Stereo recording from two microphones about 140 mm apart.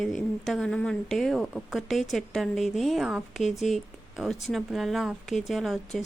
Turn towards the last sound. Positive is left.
turn(degrees=0)  # may be behind; listen again after turning